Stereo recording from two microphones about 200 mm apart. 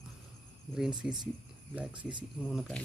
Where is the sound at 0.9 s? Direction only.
20° right (ahead or behind).